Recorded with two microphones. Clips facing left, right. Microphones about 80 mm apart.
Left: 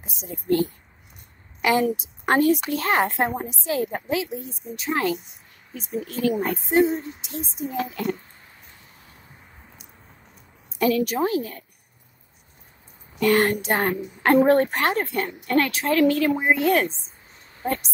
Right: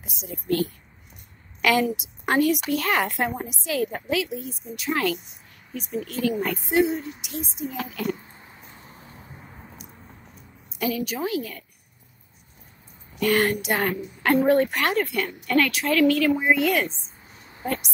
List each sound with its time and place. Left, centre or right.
0.0 s a woman's voice: left
2.0 s a woman's voice: left
6.0 s a woman's voice: left
8.2 s a sound: right
10.8 s a woman's voice: left
11.1 s speech: left
13.2 s speech: left
17.4 s a sound: centre